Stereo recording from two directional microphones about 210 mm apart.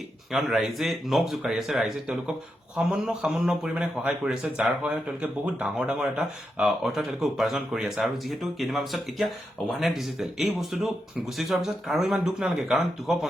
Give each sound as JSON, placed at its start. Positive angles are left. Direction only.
{"t": 0.3, "sound": "a man's voice", "side_deg": 0}